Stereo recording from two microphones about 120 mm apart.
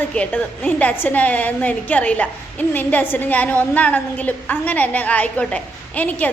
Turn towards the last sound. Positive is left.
turn(degrees=15)  # may be behind; listen again after turning